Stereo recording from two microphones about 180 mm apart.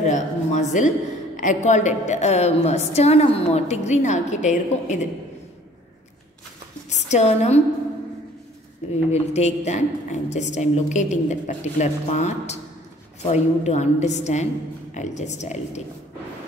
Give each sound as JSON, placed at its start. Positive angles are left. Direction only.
{"t": 0.0, "sound": "a woman's voice", "side_deg": 40}
{"t": 6.9, "sound": "speech", "side_deg": 40}
{"t": 8.9, "sound": "a woman's voice", "side_deg": 35}